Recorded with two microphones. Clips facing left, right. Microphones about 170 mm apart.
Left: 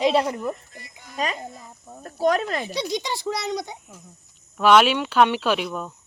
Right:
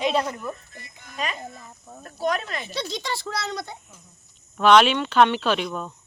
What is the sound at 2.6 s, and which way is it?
Speech, 15° left (ahead or behind).